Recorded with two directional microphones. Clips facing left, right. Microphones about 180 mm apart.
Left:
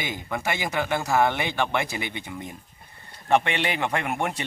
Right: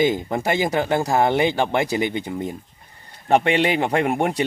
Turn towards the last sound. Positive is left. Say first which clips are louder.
# right 7 dB
turn(degrees=-40)  # may be behind; listen again after turning